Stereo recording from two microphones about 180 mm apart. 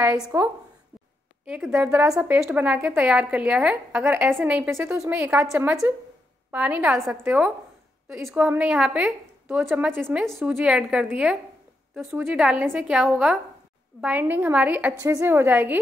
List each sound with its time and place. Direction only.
0.3 s a woman's voice: 15° right (ahead or behind)